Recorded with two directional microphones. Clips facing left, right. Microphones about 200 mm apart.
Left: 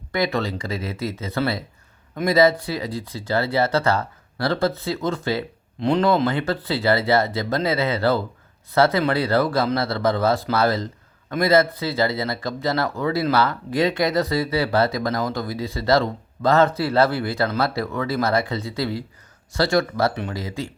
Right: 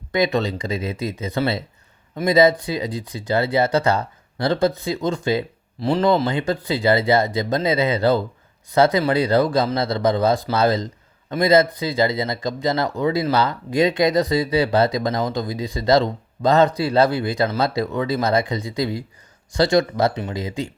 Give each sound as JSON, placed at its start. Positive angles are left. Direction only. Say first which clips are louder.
{"t": 0.1, "sound": "speech", "louder": "right 3 dB", "side_deg": -20}